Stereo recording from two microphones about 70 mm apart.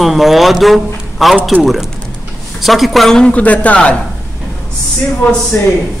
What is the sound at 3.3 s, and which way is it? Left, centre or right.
Speech, left.